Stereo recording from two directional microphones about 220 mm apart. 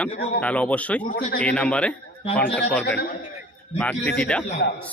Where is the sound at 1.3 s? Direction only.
5° left (ahead or behind).